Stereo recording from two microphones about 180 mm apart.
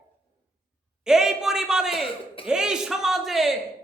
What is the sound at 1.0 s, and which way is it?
Speech, 5° right (ahead or behind).